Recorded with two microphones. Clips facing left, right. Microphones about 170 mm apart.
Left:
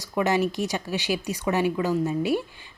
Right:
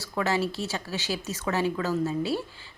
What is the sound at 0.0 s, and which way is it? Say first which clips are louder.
Speech: left 4 dB; 15° left (ahead or behind).